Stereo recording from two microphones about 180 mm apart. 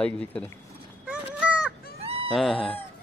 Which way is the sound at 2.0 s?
30° right (ahead or behind).